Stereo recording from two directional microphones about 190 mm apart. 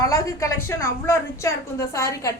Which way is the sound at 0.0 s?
15° left (ahead or behind).